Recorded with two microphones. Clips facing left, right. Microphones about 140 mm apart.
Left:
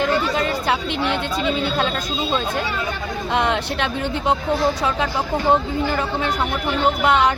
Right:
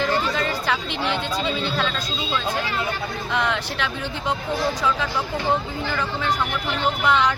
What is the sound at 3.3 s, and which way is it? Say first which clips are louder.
Speech: left 4 dB; 55° left (ahead or behind).